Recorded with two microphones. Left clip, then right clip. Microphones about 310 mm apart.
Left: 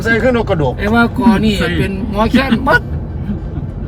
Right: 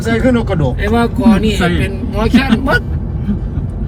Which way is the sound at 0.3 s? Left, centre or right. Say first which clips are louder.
Left 1 dB; left.